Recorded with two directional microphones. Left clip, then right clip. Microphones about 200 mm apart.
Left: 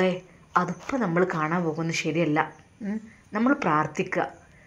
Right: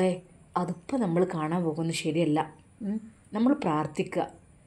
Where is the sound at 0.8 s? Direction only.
5° right (ahead or behind).